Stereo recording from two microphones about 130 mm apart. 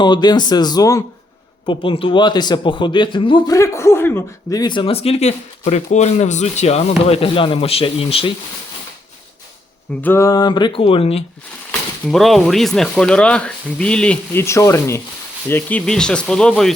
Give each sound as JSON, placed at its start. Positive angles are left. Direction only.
{"t": 0.0, "sound": "a man's voice", "side_deg": 35}
{"t": 1.6, "sound": "a man's voice", "side_deg": 40}
{"t": 3.5, "sound": "speech", "side_deg": 25}
{"t": 4.5, "sound": "speech", "side_deg": 35}
{"t": 10.0, "sound": "a man's voice", "side_deg": 20}
{"t": 12.1, "sound": "speech", "side_deg": 0}
{"t": 14.4, "sound": "speech", "side_deg": 20}
{"t": 15.9, "sound": "speech", "side_deg": 5}